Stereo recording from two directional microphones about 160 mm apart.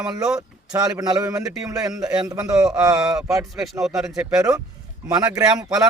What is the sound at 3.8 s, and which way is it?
Speech, 5° right (ahead or behind).